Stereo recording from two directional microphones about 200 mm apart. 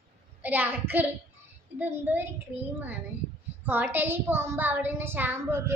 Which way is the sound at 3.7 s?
10° right (ahead or behind).